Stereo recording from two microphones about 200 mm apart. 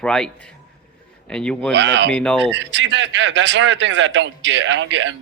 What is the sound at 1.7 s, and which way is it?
Speech, 60° right (ahead or behind).